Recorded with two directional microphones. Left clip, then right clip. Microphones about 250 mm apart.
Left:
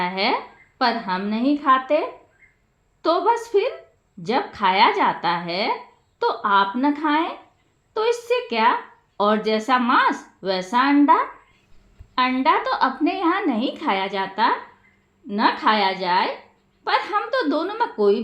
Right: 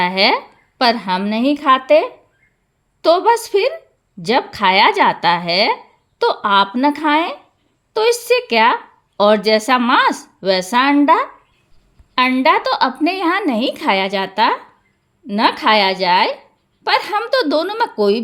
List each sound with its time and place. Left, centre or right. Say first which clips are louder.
0.0 s a woman's voice: right 7 dB; right